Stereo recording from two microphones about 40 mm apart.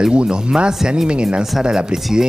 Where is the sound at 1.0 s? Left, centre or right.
Right.